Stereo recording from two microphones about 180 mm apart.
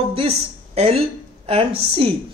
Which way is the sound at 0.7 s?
35° right (ahead or behind).